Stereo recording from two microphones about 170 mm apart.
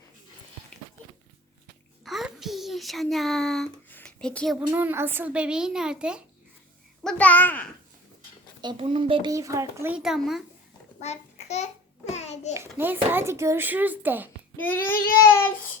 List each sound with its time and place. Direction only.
2.0 s a sound: centre (ahead or behind)
4.7 s a child's voice: 10° right (ahead or behind)
7.0 s a child's voice: 5° left (ahead or behind)
8.6 s speech: 35° right (ahead or behind)
9.3 s a child's voice: 20° right (ahead or behind)
10.0 s a child's voice: centre (ahead or behind)
11.0 s a sound: 40° left (ahead or behind)
12.5 s a child's voice: 10° right (ahead or behind)
14.5 s child singing: 15° left (ahead or behind)
14.9 s child singing: 60° left (ahead or behind)